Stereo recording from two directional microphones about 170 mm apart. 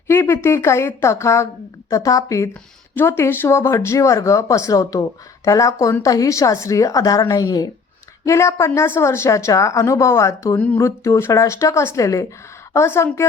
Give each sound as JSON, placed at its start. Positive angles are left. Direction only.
{"t": 0.1, "sound": "a woman's voice", "side_deg": 15}